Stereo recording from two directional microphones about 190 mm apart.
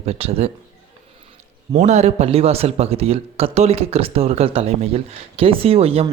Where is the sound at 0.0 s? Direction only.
30° right (ahead or behind).